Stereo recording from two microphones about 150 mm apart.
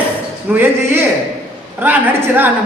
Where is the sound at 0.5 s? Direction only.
15° right (ahead or behind).